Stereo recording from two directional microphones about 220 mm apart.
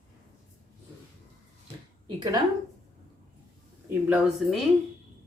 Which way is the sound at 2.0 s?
20° right (ahead or behind).